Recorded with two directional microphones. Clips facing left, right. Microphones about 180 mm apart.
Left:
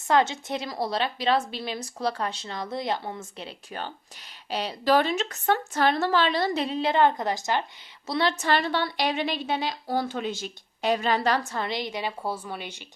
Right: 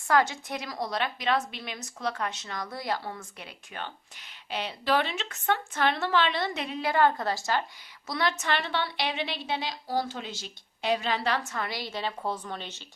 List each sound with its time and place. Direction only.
0.1 s a woman's voice: 25° left (ahead or behind)